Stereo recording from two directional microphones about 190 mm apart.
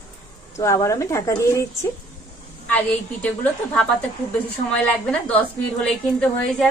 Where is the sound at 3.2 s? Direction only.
10° left (ahead or behind).